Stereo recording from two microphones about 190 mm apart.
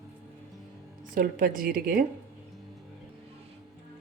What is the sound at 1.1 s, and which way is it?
Speech, 50° right (ahead or behind).